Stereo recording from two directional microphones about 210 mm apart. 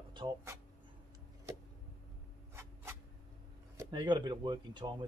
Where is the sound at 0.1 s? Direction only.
25° right (ahead or behind).